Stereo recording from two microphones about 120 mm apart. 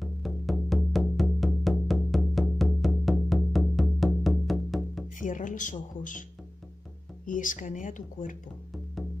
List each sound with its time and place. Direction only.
0.0 s music: centre (ahead or behind)
5.2 s speech: 90° left
7.2 s speech: 90° left